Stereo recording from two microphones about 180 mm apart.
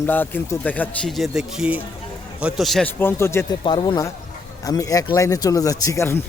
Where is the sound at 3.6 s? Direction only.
30° left (ahead or behind).